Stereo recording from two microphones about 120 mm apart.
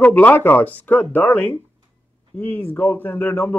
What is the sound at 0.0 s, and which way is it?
A man's voice, 15° left (ahead or behind).